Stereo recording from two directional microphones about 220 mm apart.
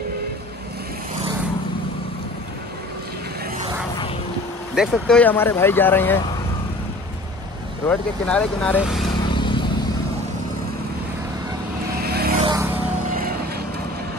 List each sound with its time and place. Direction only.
4.7 s speech: centre (ahead or behind)
7.8 s speech: 10° left (ahead or behind)
9.3 s vehicle: 20° left (ahead or behind)
12.0 s vehicle: 45° right (ahead or behind)